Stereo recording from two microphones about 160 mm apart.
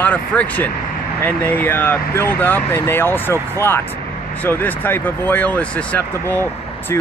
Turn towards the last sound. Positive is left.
turn(degrees=10)  # may be behind; listen again after turning